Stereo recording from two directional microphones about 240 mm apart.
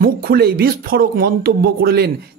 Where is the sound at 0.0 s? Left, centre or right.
Right.